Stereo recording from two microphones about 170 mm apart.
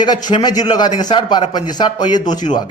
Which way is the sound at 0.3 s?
25° left (ahead or behind).